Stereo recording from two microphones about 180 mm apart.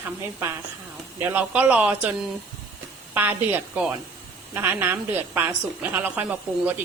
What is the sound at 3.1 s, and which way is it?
A woman's voice, 10° right (ahead or behind).